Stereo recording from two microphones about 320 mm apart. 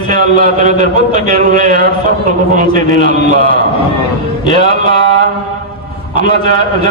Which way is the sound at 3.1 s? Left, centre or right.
Left.